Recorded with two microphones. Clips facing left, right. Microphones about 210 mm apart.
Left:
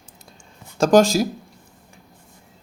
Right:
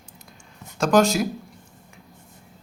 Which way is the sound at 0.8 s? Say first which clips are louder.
Left 4 dB; 30° left (ahead or behind).